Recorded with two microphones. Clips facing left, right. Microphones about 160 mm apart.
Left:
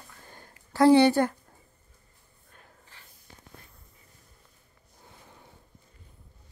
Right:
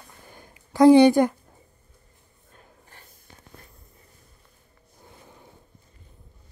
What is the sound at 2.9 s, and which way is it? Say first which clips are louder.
Fireworks: right 5 dB; 50° right (ahead or behind).